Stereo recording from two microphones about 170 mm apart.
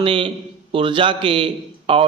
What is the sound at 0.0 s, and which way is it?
A man's voice, 30° right (ahead or behind).